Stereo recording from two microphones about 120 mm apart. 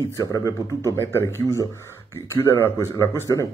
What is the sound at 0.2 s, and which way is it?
Speech, 25° left (ahead or behind).